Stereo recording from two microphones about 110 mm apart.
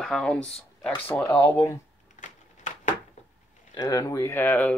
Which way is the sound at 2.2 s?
90° left.